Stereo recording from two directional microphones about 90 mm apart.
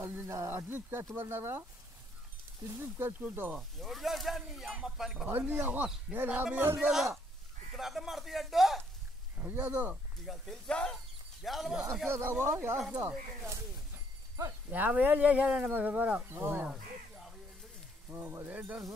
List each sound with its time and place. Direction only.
0.0 s speech: 25° right (ahead or behind)
2.6 s speech: 30° right (ahead or behind)
3.7 s speech: centre (ahead or behind)
5.2 s speech: 20° right (ahead or behind)
6.8 s speech: 5° right (ahead or behind)
9.4 s speech: 15° right (ahead or behind)
10.2 s speech: centre (ahead or behind)
10.7 s speech: 10° left (ahead or behind)
11.4 s speech: centre (ahead or behind)
12.1 s speech: 25° right (ahead or behind)
14.7 s speech: 15° right (ahead or behind)
18.1 s speech: 25° right (ahead or behind)